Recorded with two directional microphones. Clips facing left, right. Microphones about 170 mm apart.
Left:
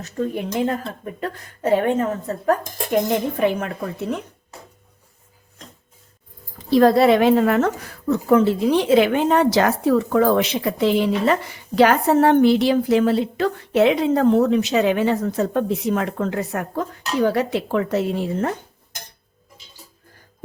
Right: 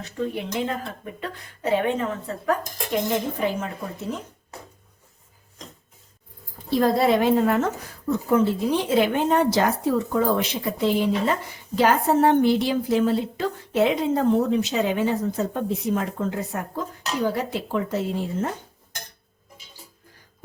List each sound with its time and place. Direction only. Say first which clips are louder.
0.0 s a woman's voice: left 3 dB; 45° left (ahead or behind)
3.3 s speech: left 5 dB; 65° left (ahead or behind)
6.7 s speech: left 6 dB; 80° left